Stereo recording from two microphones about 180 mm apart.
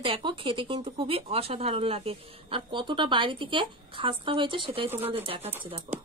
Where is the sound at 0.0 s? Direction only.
30° right (ahead or behind).